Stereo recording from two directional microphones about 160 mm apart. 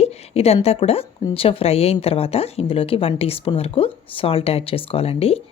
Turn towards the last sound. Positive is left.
turn(degrees=40)  # may be behind; listen again after turning